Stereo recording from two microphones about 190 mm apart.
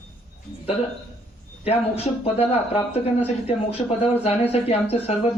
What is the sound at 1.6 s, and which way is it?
Speech, 30° left (ahead or behind).